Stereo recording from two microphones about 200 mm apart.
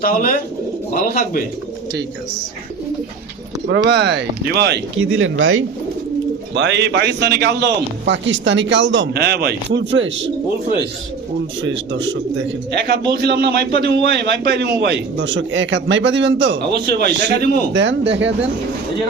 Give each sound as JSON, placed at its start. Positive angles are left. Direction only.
{"t": 0.0, "sound": "speech", "side_deg": 45}
{"t": 3.8, "sound": "a man's voice", "side_deg": -55}
{"t": 6.5, "sound": "a man's voice", "side_deg": -60}